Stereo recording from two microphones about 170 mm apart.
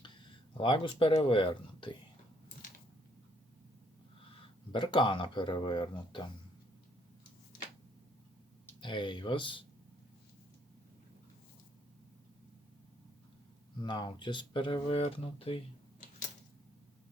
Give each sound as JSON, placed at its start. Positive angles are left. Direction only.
{"t": 0.5, "sound": "speech", "side_deg": 30}
{"t": 4.7, "sound": "speech", "side_deg": 30}
{"t": 8.8, "sound": "speech", "side_deg": 30}
{"t": 13.8, "sound": "speech", "side_deg": 25}